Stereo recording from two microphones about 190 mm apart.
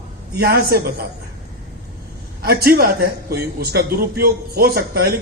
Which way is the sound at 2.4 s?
55° right (ahead or behind).